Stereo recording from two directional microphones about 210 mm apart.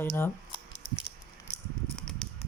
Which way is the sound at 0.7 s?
45° left (ahead or behind).